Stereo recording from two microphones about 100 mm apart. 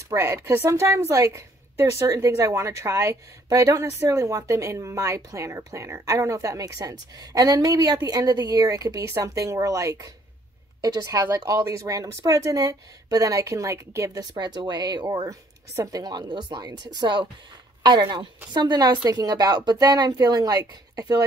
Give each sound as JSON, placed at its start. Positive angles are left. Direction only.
{"t": 0.1, "sound": "a woman's voice", "side_deg": -25}
{"t": 14.3, "sound": "speech", "side_deg": -50}